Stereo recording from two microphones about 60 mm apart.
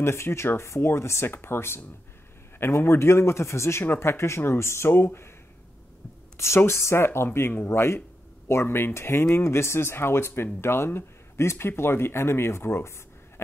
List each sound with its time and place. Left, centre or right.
0.0 s speech: left
3.8 s speech: left
6.3 s speech: left